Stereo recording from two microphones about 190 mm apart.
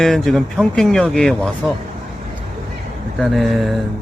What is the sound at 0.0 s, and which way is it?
Speech, centre (ahead or behind).